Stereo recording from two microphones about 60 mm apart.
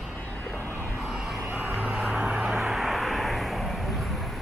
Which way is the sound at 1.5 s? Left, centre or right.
Right.